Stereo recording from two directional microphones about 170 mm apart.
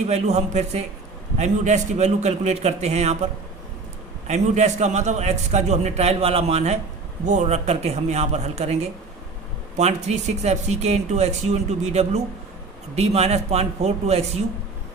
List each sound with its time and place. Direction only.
0.1 s a man's voice: 40° right (ahead or behind)
4.3 s a man's voice: 45° right (ahead or behind)